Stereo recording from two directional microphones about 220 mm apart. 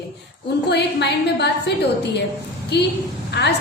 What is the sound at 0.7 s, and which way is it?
A woman's voice, 50° left (ahead or behind).